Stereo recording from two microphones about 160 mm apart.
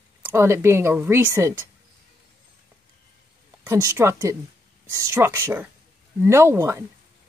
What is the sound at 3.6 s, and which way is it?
Speech, 15° right (ahead or behind).